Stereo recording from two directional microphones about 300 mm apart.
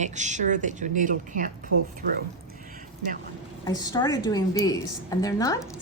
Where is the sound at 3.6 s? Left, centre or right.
Centre.